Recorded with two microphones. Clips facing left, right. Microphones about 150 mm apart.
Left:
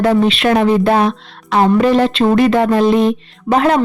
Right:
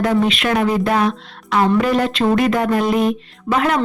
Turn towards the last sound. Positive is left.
turn(degrees=30)  # may be behind; listen again after turning